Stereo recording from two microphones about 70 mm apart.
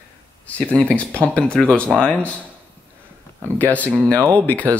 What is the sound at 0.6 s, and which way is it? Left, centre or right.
Speech, centre.